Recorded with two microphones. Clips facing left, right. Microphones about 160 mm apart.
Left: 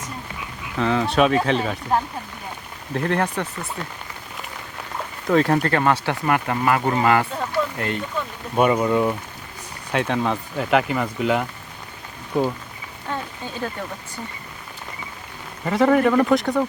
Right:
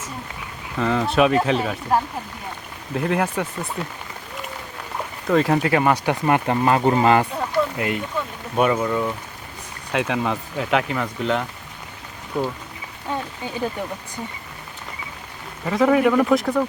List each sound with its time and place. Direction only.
0.8 s speech: centre (ahead or behind)
5.3 s speech: centre (ahead or behind); by 7.3 s 20° right (ahead or behind)
7.3 s a sound: 15° right (ahead or behind)
8.7 s speech: 10° left (ahead or behind)
9.9 s speech: 5° right (ahead or behind)
13.1 s a sound: 15° right (ahead or behind)
15.6 s speech: centre (ahead or behind)